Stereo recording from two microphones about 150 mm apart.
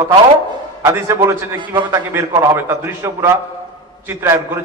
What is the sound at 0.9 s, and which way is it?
A man's voice, 20° right (ahead or behind).